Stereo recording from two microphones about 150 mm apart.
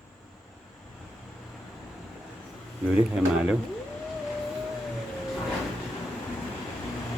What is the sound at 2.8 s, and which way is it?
Speech, 5° right (ahead or behind).